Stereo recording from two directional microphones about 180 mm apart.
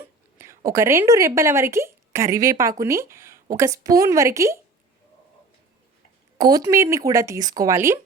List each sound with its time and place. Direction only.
0.0 s a woman's voice: 15° right (ahead or behind)
6.3 s speech: 20° right (ahead or behind)